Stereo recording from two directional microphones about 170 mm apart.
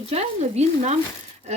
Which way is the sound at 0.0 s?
40° right (ahead or behind).